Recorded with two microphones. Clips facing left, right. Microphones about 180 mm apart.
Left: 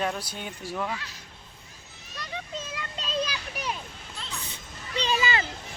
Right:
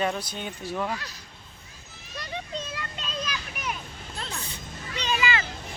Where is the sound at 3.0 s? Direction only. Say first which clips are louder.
Left 6 dB; 30° left (ahead or behind).